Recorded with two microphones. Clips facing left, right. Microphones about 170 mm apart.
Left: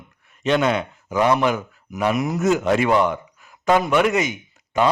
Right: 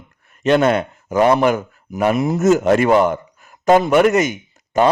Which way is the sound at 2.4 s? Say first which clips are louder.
Right 5 dB; 45° right (ahead or behind).